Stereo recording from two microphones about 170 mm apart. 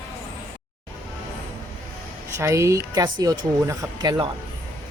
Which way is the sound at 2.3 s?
15° right (ahead or behind).